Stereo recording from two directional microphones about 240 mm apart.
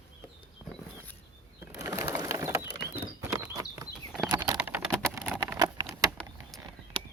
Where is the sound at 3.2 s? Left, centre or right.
Centre.